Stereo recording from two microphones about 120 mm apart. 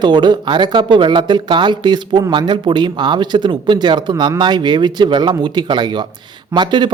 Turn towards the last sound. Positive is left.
turn(degrees=-40)  # may be behind; listen again after turning